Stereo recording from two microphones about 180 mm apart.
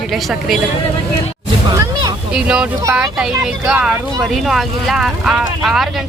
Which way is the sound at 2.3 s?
5° right (ahead or behind).